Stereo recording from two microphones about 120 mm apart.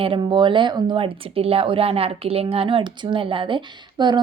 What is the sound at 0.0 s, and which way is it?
Speech, 45° right (ahead or behind).